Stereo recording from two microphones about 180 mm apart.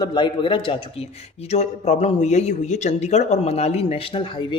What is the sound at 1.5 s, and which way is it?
Speech, 40° left (ahead or behind).